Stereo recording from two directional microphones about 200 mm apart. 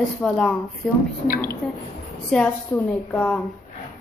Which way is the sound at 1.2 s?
45° left (ahead or behind).